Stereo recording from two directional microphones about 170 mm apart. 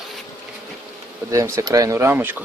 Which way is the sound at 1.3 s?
20° right (ahead or behind).